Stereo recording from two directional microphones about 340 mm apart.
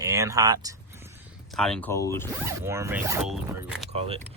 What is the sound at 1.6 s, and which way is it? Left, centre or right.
Speech, centre.